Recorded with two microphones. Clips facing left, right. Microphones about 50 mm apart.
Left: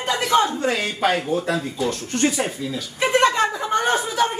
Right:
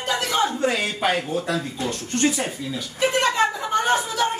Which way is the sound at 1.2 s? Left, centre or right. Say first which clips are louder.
Left 2 dB; centre.